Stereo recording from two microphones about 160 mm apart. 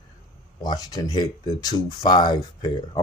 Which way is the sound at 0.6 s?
25° left (ahead or behind).